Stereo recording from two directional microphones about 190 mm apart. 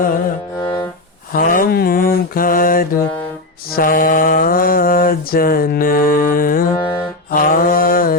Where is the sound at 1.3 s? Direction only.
50° left (ahead or behind).